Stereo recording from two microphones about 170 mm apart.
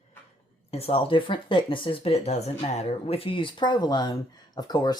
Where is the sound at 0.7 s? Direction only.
35° left (ahead or behind).